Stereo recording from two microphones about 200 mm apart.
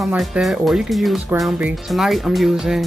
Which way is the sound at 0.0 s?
5° right (ahead or behind).